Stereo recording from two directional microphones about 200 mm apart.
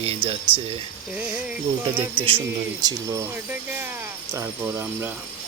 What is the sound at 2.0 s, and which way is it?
Speech, 25° right (ahead or behind).